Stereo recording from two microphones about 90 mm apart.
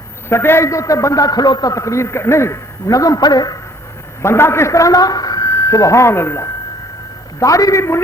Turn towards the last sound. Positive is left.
turn(degrees=35)  # may be behind; listen again after turning